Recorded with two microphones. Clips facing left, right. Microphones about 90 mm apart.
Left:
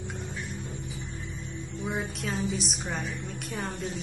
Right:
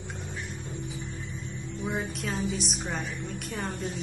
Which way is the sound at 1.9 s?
Centre (ahead or behind).